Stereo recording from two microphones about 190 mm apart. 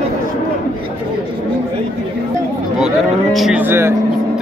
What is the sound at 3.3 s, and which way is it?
Speech, centre (ahead or behind).